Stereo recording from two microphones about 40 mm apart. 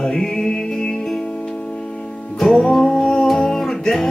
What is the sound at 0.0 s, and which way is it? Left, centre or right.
Music, centre.